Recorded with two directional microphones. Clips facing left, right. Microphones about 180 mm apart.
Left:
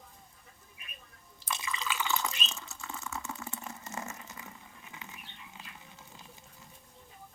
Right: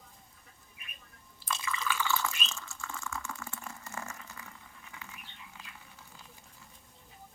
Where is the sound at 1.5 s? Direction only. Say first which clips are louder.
Right 2 dB; 20° left (ahead or behind).